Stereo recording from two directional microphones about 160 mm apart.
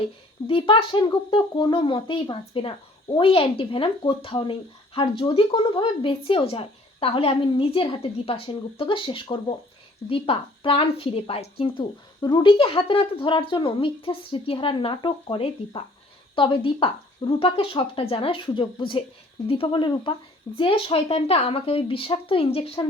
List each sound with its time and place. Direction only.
0.4 s a woman's voice: 35° left (ahead or behind)